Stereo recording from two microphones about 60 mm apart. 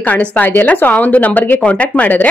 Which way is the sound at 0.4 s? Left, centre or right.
Left.